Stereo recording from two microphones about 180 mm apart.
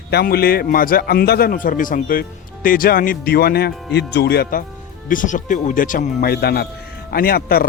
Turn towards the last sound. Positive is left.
turn(degrees=55)  # may be behind; listen again after turning